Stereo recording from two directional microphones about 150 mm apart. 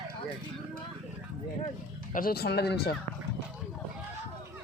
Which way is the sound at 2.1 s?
80° left.